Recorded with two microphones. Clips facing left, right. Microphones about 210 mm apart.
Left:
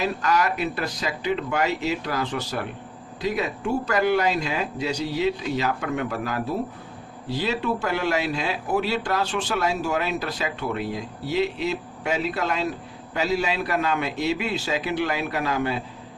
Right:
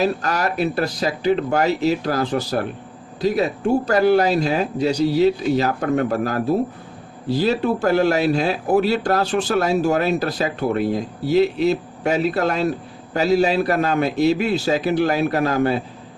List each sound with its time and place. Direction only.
0.0 s a man's voice: 35° right (ahead or behind)